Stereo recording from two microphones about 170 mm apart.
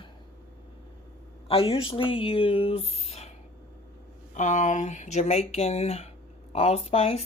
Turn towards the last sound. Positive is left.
turn(degrees=35)  # may be behind; listen again after turning